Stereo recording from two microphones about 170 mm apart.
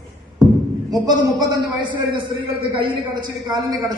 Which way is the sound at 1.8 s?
30° right (ahead or behind).